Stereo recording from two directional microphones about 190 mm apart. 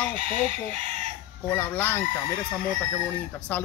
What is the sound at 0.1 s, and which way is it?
Speech, 35° right (ahead or behind).